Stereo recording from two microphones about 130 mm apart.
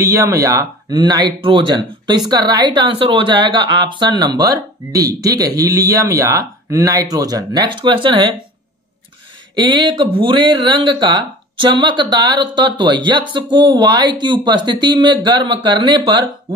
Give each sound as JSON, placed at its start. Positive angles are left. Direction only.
{"t": 0.0, "sound": "speech", "side_deg": -25}
{"t": 9.6, "sound": "speech", "side_deg": -35}